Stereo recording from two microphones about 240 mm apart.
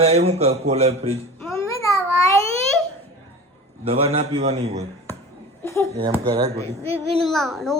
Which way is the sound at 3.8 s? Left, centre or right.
Right.